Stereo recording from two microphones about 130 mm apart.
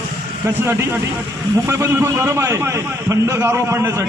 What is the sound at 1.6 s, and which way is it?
A man's voice, 20° right (ahead or behind).